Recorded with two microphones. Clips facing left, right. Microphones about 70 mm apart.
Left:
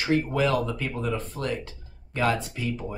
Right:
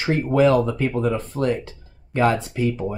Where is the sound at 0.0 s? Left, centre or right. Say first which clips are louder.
Right 6 dB; right.